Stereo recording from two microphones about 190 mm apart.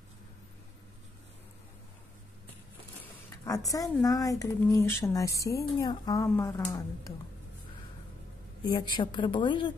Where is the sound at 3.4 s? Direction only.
20° left (ahead or behind).